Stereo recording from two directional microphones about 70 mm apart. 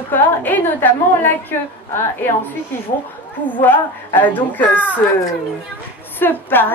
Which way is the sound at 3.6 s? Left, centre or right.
Left.